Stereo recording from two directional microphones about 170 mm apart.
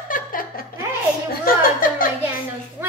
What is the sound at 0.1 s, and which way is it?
Laughter, 55° left (ahead or behind).